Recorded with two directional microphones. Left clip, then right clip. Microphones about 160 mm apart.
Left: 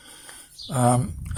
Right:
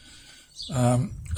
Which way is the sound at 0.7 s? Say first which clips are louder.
Left 4 dB; 15° right (ahead or behind).